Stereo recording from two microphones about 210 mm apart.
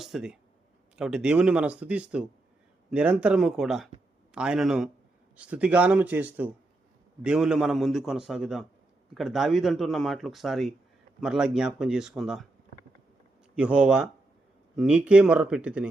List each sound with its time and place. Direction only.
0.0 s speech: centre (ahead or behind)
13.6 s speech: 5° right (ahead or behind)